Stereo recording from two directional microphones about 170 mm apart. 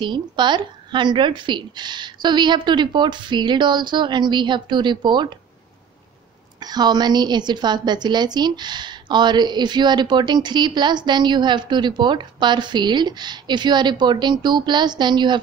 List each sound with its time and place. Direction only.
0.0 s a woman's voice: 25° right (ahead or behind)
6.6 s a woman's voice: 25° right (ahead or behind)